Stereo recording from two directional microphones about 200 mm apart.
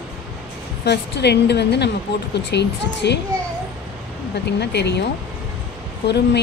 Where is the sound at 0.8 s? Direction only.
55° left (ahead or behind).